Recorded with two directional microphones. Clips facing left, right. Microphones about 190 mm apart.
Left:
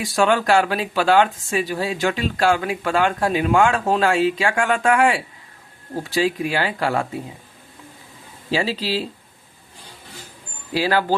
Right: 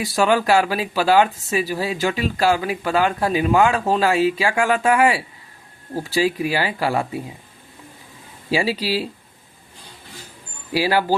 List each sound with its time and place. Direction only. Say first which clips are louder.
0.1 s speech: even; 5° right (ahead or behind)
8.4 s speech: right 1 dB; 10° right (ahead or behind)
10.8 s speech: right 1 dB; 10° right (ahead or behind)